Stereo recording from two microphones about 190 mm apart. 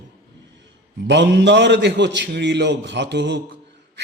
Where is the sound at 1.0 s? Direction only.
65° right (ahead or behind).